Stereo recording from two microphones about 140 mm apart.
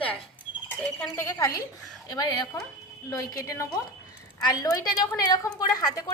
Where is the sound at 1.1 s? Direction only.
20° left (ahead or behind).